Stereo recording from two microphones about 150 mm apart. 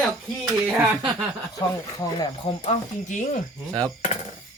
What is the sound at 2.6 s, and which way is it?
Speech, 50° left (ahead or behind).